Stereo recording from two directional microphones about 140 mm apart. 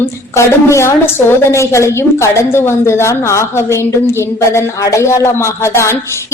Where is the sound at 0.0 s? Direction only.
20° left (ahead or behind).